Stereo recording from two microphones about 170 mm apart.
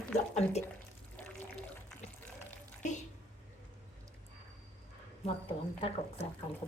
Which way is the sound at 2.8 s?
45° left (ahead or behind).